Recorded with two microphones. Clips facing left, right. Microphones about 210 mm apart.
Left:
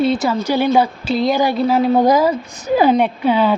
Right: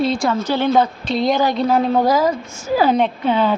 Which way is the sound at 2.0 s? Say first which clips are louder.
Left 3 dB; 15° left (ahead or behind).